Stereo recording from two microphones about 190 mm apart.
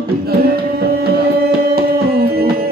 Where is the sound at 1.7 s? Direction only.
55° right (ahead or behind).